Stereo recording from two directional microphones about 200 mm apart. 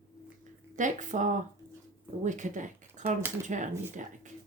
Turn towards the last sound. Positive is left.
turn(degrees=-40)  # may be behind; listen again after turning